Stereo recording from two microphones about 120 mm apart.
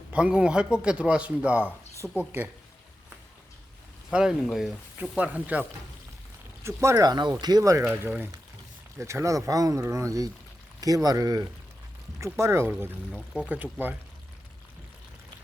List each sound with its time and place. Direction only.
0.1 s speech: 10° right (ahead or behind)
4.1 s speech: 5° right (ahead or behind)
6.8 s speech: 30° right (ahead or behind)